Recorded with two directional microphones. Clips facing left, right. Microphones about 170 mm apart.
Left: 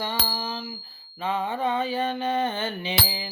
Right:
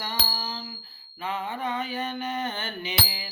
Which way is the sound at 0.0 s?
25° left (ahead or behind).